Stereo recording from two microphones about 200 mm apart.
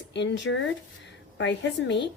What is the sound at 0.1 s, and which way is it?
Speech, 60° left (ahead or behind).